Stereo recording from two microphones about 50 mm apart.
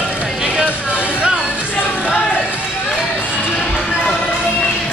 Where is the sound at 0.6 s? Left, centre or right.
Right.